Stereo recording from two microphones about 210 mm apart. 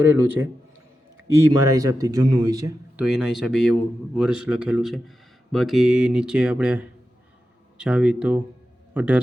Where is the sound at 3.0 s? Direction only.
Centre (ahead or behind).